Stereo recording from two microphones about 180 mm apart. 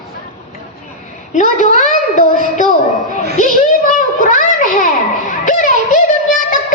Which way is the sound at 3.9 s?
45° left (ahead or behind).